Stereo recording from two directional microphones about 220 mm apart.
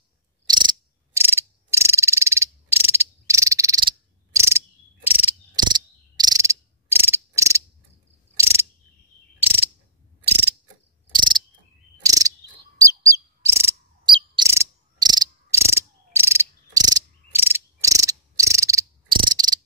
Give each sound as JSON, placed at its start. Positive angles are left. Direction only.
{"t": 0.5, "sound": "frog", "side_deg": -20}
{"t": 5.7, "sound": "cricket", "side_deg": -20}
{"t": 9.4, "sound": "cricket", "side_deg": -10}
{"t": 11.1, "sound": "mechanisms", "side_deg": -20}
{"t": 12.0, "sound": "cricket", "side_deg": -15}
{"t": 12.8, "sound": "bird", "side_deg": -15}
{"t": 14.1, "sound": "cricket", "side_deg": -20}